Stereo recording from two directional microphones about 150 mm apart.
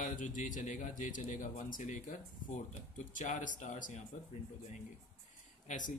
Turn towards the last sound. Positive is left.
turn(degrees=60)  # may be behind; listen again after turning